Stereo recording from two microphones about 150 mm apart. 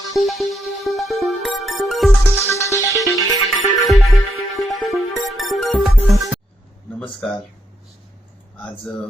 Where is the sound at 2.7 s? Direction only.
20° left (ahead or behind).